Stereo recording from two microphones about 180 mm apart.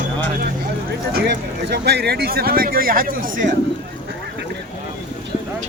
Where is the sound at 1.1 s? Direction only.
60° right (ahead or behind).